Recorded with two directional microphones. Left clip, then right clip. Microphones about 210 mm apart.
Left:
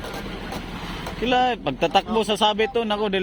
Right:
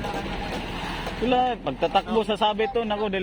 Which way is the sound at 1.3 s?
25° left (ahead or behind).